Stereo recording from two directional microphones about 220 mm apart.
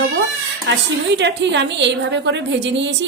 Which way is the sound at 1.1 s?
55° right (ahead or behind).